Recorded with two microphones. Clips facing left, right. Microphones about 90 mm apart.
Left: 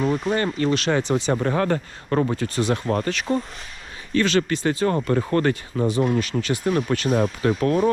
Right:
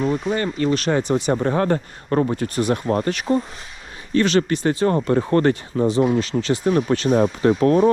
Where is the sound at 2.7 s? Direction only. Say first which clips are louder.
Right 2 dB; 40° right (ahead or behind); by 7.1 s 25° right (ahead or behind).